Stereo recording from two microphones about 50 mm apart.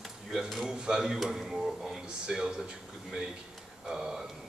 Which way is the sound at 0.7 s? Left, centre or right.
Centre.